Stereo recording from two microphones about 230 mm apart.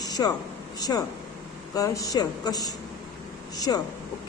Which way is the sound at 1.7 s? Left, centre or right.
Centre.